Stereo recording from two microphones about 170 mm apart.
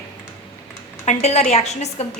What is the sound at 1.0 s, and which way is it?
A woman's voice, 40° left (ahead or behind).